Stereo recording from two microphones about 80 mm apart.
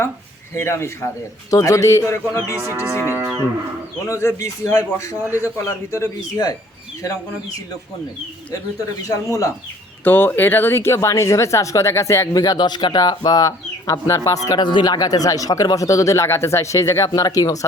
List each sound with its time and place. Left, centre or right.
0.5 s a man's voice: left
2.9 s speech: right
4.1 s a man's voice: left
6.3 s speech: left
9.0 s speech: left
10.0 s a man's voice: left
12.3 s speech: left
14.5 s speech: left
14.9 s speech: left
17.1 s speech: left